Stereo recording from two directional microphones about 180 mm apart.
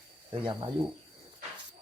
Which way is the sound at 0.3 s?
30° right (ahead or behind).